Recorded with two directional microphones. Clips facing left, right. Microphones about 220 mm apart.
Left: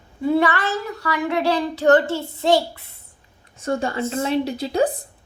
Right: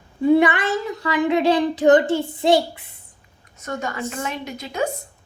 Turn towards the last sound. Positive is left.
turn(degrees=35)  # may be behind; listen again after turning